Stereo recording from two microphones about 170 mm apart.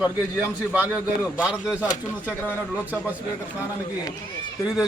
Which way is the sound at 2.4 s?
10° left (ahead or behind).